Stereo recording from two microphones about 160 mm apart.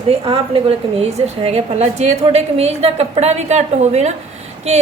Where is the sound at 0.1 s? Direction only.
35° right (ahead or behind).